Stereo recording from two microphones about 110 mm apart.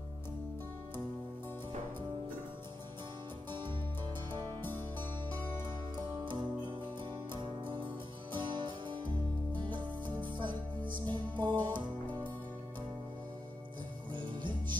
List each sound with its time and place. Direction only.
3.5 s music: 45° right (ahead or behind)
4.7 s music: 15° left (ahead or behind)
6.2 s music: 45° right (ahead or behind)
14.1 s music: 45° right (ahead or behind)